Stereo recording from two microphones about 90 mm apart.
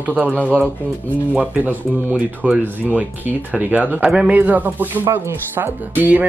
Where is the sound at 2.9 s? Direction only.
20° right (ahead or behind).